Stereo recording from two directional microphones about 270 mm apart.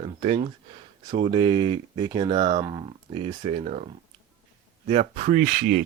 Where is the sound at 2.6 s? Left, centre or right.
Centre; by 5.8 s right.